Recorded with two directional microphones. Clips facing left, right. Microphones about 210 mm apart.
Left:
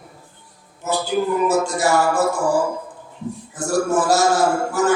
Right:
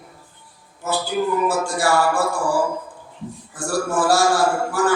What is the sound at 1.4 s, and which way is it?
Speech, 20° left (ahead or behind).